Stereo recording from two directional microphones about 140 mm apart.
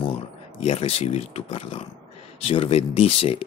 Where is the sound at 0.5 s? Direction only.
45° left (ahead or behind).